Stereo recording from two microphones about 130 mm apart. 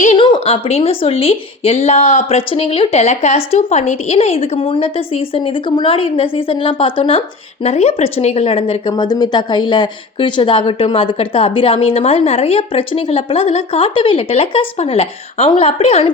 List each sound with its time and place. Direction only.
0.2 s speech: 40° left (ahead or behind)
7.6 s speech: 55° left (ahead or behind)
8.9 s speech: 30° left (ahead or behind); by 16.1 s 50° left (ahead or behind)